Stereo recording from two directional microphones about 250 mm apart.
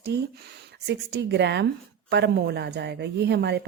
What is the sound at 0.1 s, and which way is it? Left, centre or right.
A woman's voice, right.